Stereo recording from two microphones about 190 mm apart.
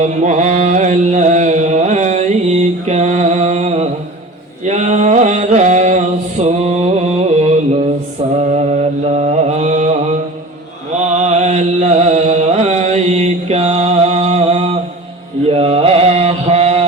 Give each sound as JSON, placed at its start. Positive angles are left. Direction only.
{"t": 0.0, "sound": "mantra", "side_deg": -40}
{"t": 11.0, "sound": "a sound", "side_deg": -40}
{"t": 15.4, "sound": "mantra", "side_deg": -30}